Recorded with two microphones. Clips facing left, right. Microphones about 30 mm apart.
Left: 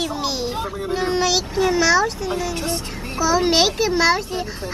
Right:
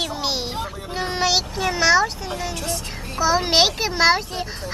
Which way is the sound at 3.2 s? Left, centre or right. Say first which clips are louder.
Left 1 dB; centre.